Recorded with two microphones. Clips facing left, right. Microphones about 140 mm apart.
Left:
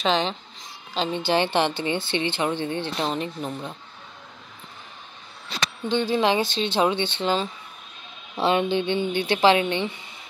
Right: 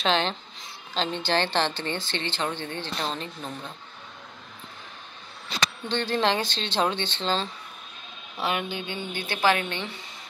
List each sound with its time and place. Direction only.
0.0 s a woman's voice: 5° left (ahead or behind)
5.9 s a woman's voice: 5° left (ahead or behind)
8.4 s a woman's voice: 30° left (ahead or behind)